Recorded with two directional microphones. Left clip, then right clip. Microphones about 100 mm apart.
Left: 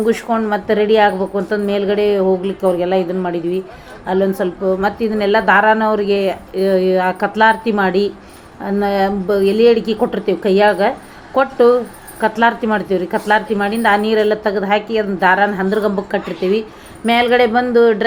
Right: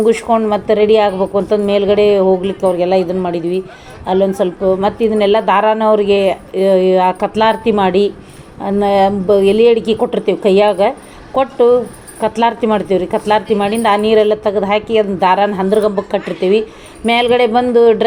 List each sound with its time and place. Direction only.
0.0 s speech: 35° right (ahead or behind)